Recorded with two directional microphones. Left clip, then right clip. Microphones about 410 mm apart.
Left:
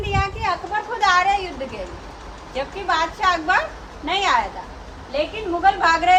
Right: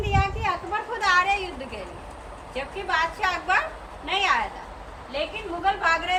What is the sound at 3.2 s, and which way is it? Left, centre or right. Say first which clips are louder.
A woman's voice: left 5 dB; centre.